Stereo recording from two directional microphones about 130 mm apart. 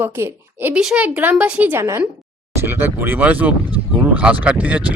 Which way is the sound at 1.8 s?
20° right (ahead or behind).